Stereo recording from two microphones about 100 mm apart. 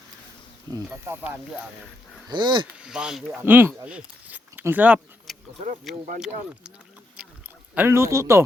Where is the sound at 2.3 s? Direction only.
50° right (ahead or behind).